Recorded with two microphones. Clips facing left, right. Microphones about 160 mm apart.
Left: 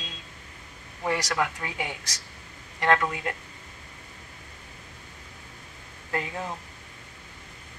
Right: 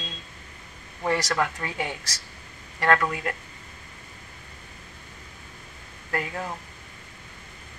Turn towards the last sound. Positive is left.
turn(degrees=20)  # may be behind; listen again after turning